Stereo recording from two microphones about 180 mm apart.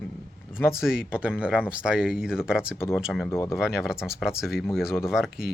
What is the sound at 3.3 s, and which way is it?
Speech, 15° left (ahead or behind).